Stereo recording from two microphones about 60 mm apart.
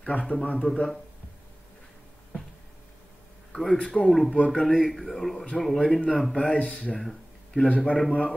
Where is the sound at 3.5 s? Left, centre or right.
Centre.